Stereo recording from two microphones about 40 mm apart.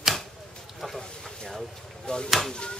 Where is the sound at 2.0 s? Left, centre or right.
Left.